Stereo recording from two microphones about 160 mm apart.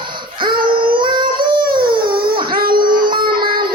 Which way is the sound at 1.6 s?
65° right (ahead or behind).